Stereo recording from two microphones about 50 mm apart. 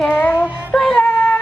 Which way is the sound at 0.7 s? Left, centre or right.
Centre.